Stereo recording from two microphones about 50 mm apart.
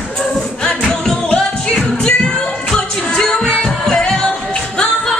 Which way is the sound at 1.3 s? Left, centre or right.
Centre.